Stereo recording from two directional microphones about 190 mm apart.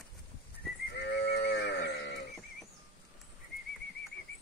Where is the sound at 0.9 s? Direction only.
60° left (ahead or behind).